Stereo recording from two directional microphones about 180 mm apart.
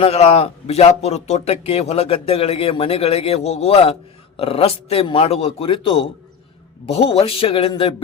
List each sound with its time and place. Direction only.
0.0 s speech: 35° left (ahead or behind)